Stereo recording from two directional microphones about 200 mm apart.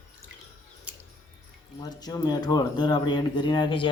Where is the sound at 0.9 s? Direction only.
5° right (ahead or behind).